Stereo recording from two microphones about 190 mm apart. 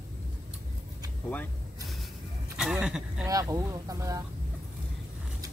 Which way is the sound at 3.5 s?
20° right (ahead or behind).